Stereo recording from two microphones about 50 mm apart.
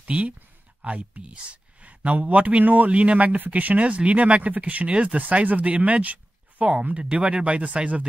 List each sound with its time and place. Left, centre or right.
0.0 s speech: right